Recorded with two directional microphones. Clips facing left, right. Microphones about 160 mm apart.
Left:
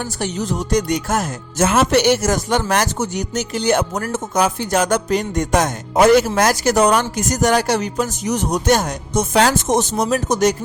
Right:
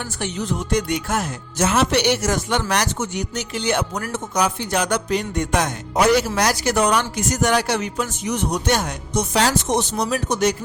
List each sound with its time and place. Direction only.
0.2 s speech: 40° left (ahead or behind)